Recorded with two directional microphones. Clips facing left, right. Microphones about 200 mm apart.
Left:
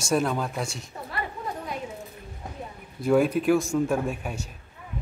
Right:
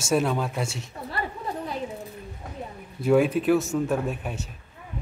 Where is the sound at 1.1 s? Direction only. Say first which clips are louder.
Right 2 dB; 30° right (ahead or behind).